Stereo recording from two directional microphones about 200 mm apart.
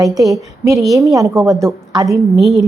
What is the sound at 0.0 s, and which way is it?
A woman's voice, 15° right (ahead or behind).